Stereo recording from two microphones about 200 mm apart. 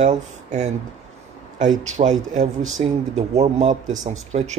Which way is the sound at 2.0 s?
35° right (ahead or behind).